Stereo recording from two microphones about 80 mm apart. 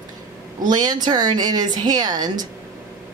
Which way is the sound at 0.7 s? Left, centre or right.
Right.